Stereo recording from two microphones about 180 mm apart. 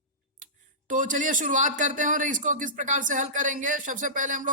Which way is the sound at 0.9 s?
45° right (ahead or behind).